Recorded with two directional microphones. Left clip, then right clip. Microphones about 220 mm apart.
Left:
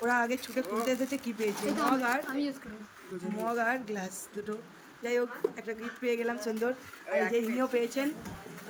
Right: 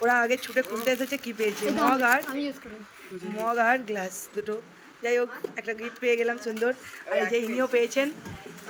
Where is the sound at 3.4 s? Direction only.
10° right (ahead or behind).